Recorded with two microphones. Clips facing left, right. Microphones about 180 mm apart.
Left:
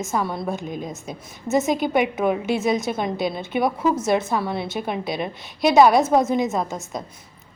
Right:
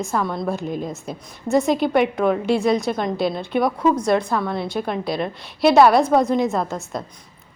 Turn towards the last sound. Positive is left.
turn(degrees=0)  # may be behind; listen again after turning